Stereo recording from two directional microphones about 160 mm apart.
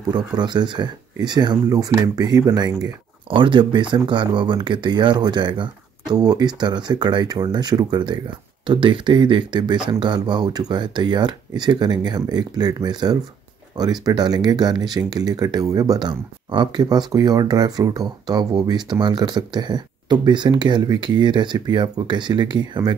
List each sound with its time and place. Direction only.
0.1 s speech: 25° right (ahead or behind)